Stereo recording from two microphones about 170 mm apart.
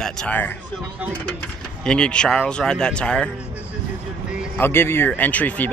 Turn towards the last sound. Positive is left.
turn(degrees=10)  # may be behind; listen again after turning